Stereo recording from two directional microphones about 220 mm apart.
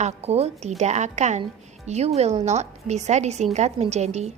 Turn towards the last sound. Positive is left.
turn(degrees=-30)  # may be behind; listen again after turning